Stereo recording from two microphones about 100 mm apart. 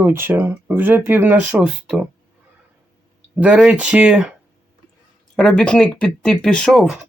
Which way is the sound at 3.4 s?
10° right (ahead or behind).